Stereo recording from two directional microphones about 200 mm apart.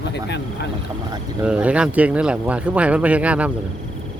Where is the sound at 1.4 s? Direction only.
5° right (ahead or behind).